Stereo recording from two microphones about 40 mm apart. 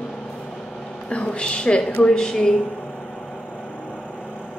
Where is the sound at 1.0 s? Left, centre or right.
Left.